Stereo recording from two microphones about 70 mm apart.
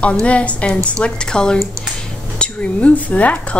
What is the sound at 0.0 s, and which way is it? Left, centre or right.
A woman's voice, centre.